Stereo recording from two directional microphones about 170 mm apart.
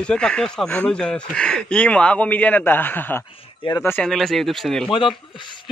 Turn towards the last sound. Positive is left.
turn(degrees=30)  # may be behind; listen again after turning